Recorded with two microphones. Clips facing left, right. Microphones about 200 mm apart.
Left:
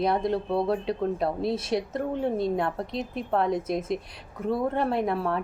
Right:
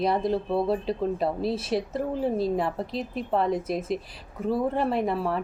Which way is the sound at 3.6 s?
30° right (ahead or behind).